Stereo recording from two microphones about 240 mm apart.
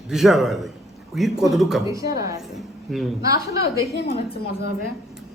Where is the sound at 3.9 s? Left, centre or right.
Left.